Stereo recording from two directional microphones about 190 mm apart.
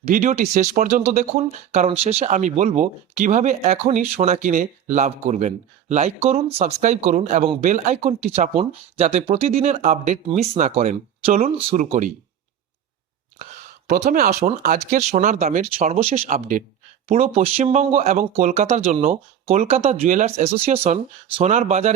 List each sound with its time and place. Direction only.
0.0 s speech: 40° right (ahead or behind)
11.9 s speech: 45° right (ahead or behind)
13.4 s a sound: 40° right (ahead or behind)
14.8 s speech: 40° right (ahead or behind)
16.3 s speech: 45° right (ahead or behind)